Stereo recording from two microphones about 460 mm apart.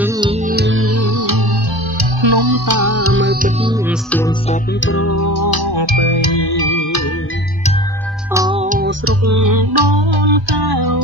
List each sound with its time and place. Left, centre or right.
0.0 s music: centre; by 1.4 s right
2.2 s music: right
4.1 s music: centre
4.7 s music: left
5.8 s music: left
8.3 s music: centre
9.2 s music: right